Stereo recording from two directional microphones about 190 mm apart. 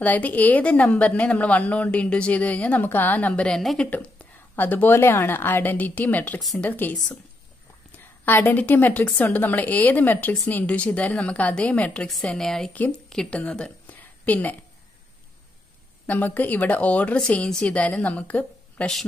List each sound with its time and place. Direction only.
0.0 s a woman's voice: 10° left (ahead or behind)
8.3 s a woman's voice: 10° left (ahead or behind)
16.1 s a woman's voice: 10° left (ahead or behind)